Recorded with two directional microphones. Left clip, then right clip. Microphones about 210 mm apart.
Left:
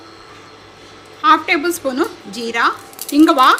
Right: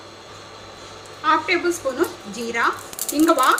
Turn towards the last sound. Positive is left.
turn(degrees=55)  # may be behind; listen again after turning